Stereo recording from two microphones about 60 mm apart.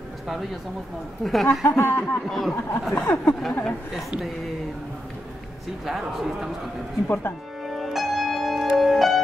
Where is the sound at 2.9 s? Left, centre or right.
Left.